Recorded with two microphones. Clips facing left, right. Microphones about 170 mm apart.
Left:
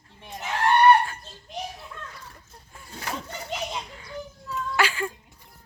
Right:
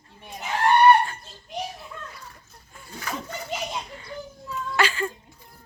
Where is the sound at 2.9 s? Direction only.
30° left (ahead or behind).